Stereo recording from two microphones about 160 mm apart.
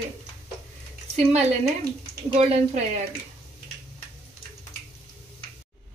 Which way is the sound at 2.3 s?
45° right (ahead or behind).